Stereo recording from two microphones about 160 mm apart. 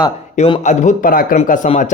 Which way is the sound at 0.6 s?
50° left (ahead or behind).